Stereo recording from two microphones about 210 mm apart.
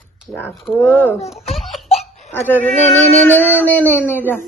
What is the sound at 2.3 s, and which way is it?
Speech, 10° left (ahead or behind).